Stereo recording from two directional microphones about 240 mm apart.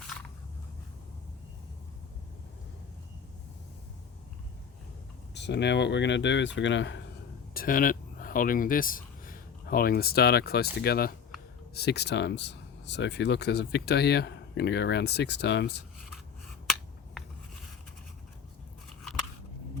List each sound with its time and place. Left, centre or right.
5.3 s speech: left
7.5 s speech: left
16.6 s finger snapping: centre